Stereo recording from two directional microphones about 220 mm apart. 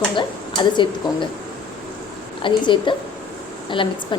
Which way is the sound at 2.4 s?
20° left (ahead or behind).